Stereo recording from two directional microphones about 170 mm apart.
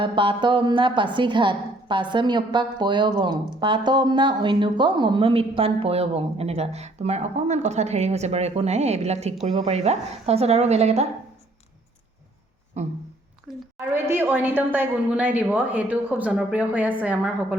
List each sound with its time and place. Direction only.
0.0 s a woman's voice: 30° right (ahead or behind)
12.8 s a woman's voice: 40° right (ahead or behind)
13.7 s a woman's voice: 15° right (ahead or behind)